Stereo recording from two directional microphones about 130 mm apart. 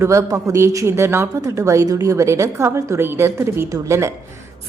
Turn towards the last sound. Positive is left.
turn(degrees=-20)  # may be behind; listen again after turning